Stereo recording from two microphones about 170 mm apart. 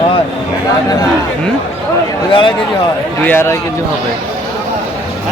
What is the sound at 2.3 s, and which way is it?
Speech, 30° left (ahead or behind).